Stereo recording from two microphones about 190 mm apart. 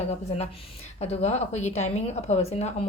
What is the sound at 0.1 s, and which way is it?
A woman's voice, 35° left (ahead or behind).